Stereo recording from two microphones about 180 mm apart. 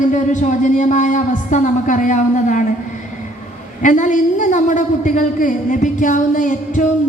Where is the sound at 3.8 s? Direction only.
45° left (ahead or behind).